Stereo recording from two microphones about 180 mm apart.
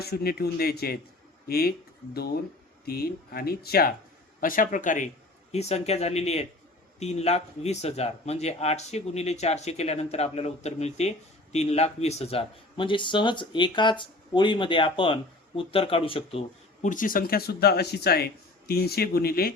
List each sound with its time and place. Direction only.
0.0 s speech: 60° left (ahead or behind)
2.8 s speech: 55° left (ahead or behind); by 16.4 s 30° left (ahead or behind)
16.8 s speech: 45° left (ahead or behind)